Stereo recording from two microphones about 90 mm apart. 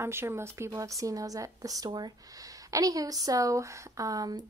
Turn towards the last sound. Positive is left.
turn(degrees=-40)  # may be behind; listen again after turning